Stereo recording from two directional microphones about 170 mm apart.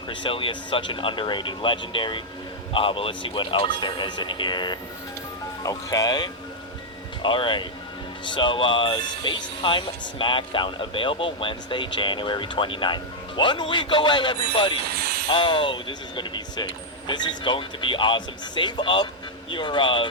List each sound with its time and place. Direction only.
0.1 s speech: 30° left (ahead or behind)
14.8 s jingle bell: 70° right (ahead or behind)
15.3 s speech: 30° left (ahead or behind)